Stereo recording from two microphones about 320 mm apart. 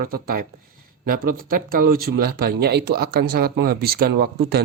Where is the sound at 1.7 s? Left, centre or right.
Right.